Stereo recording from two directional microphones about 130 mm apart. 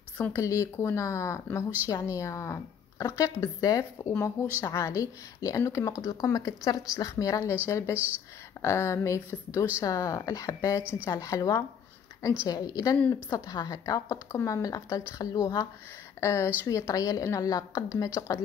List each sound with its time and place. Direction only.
0.2 s a woman's voice: 20° left (ahead or behind)
7.9 s speech: 15° right (ahead or behind)
8.6 s a woman's voice: 20° left (ahead or behind)
10.8 s speech: 10° right (ahead or behind)
11.1 s a woman's voice: 25° left (ahead or behind)